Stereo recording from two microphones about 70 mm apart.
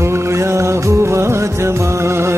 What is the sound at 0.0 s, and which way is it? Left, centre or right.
Music, right.